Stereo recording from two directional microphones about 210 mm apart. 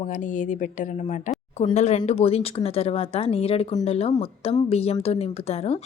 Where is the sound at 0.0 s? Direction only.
35° left (ahead or behind).